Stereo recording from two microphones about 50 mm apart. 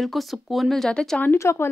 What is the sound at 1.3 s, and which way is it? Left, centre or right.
Speech, left.